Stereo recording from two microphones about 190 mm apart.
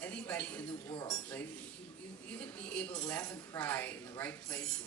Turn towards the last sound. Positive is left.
turn(degrees=10)  # may be behind; listen again after turning